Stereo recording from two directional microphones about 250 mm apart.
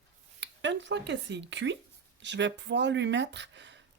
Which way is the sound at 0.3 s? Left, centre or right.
Right.